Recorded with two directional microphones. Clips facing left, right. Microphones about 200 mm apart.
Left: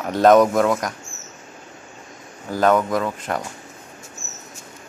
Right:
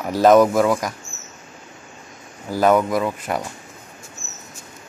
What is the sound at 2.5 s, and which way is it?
Speech, 10° right (ahead or behind).